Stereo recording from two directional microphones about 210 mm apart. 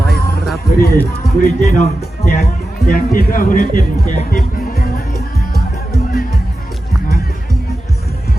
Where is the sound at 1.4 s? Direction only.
35° left (ahead or behind).